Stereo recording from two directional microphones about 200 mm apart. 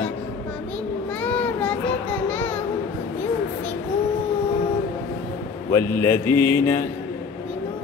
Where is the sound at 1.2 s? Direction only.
5° left (ahead or behind).